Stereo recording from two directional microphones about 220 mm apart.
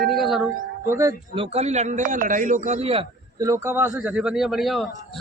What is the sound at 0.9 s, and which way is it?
A man's voice, 15° right (ahead or behind).